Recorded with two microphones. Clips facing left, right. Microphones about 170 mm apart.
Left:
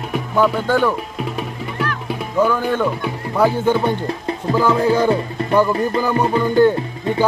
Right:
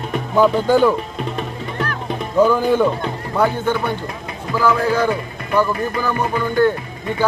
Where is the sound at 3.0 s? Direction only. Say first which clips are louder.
Left 1 dB; 10° left (ahead or behind).